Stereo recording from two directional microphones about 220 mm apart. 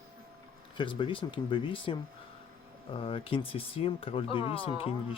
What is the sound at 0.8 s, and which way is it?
Speech, 20° left (ahead or behind).